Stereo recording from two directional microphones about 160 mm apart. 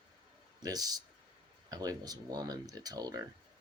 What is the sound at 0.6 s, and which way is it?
Speech, 25° right (ahead or behind).